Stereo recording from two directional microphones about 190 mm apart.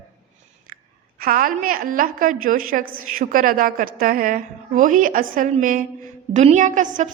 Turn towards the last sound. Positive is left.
turn(degrees=-40)  # may be behind; listen again after turning